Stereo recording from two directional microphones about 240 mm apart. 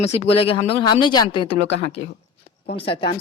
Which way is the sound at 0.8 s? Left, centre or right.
Centre.